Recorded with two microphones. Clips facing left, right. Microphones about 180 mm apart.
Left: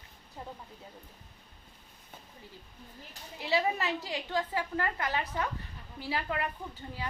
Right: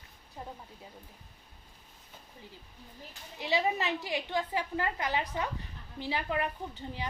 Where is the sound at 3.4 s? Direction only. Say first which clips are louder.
Even; 20° right (ahead or behind).